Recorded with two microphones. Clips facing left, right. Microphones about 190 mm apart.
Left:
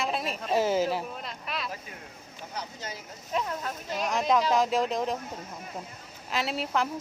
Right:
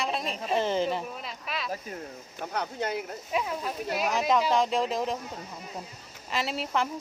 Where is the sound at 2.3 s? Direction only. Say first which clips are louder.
Right 7 dB; 60° right (ahead or behind).